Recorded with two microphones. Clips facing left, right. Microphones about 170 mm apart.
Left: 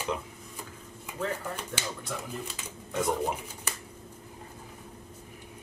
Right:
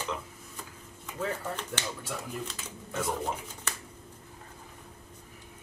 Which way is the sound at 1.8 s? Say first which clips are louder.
Even; 10° left (ahead or behind).